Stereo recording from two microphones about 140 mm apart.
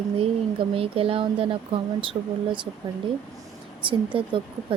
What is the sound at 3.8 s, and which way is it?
Speech, 35° right (ahead or behind).